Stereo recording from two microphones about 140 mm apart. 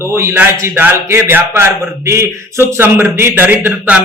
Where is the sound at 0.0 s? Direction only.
20° right (ahead or behind).